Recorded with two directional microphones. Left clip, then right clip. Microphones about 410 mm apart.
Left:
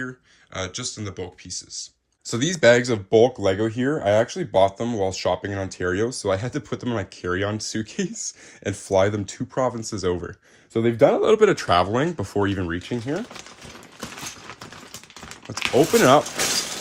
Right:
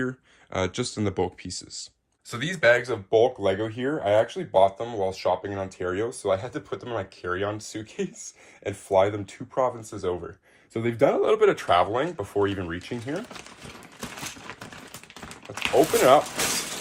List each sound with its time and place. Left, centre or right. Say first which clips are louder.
0.5 s speech: right 2 dB; centre
2.2 s speech: left 4 dB; centre
15.5 s a sound: left 4 dB; left